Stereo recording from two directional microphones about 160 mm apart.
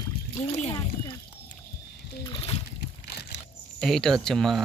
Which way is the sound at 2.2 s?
35° left (ahead or behind).